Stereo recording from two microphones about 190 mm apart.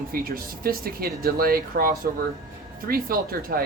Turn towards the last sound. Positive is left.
turn(degrees=-50)  # may be behind; listen again after turning